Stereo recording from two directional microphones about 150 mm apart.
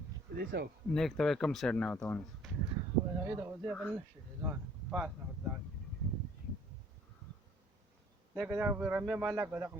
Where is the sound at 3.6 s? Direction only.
5° left (ahead or behind).